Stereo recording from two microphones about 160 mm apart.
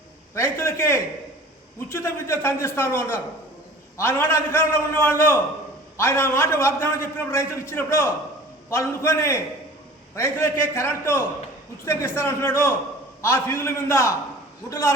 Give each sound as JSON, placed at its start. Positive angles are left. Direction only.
{"t": 0.3, "sound": "a man's voice", "side_deg": 15}